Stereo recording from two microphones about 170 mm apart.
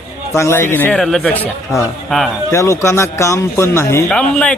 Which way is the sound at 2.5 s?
15° left (ahead or behind).